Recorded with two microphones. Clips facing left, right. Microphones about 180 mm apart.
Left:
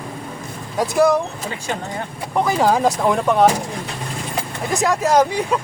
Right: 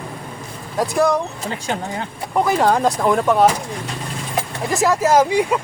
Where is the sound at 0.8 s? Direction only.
Centre (ahead or behind).